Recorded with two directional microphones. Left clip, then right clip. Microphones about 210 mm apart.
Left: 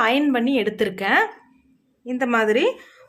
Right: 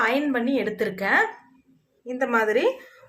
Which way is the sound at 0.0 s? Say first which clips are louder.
Left 3 dB; 50° left (ahead or behind).